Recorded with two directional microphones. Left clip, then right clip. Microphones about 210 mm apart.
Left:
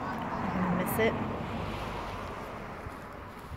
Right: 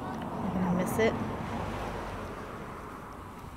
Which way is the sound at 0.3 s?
20° left (ahead or behind).